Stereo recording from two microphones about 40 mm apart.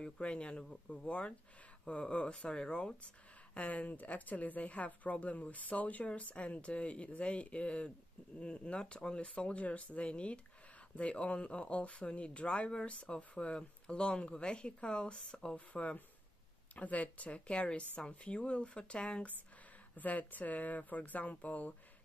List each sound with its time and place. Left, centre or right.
0.0 s speech: left
3.5 s speech: left
15.2 s speech: centre
15.5 s speech: left
20.0 s speech: left